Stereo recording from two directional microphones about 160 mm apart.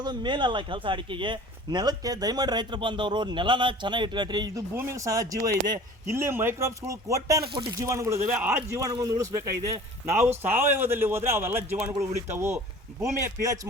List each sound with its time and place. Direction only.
0.0 s speech: 30° right (ahead or behind)
4.7 s a man's voice: 15° right (ahead or behind)